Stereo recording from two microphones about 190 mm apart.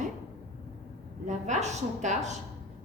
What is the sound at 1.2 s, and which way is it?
A woman's voice, 40° right (ahead or behind).